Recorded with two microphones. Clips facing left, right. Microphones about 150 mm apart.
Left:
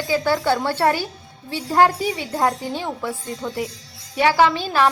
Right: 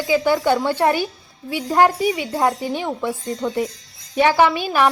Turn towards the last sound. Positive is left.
turn(degrees=-15)  # may be behind; listen again after turning